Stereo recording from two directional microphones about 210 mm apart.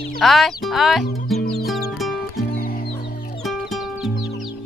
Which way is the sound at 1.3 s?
Centre (ahead or behind).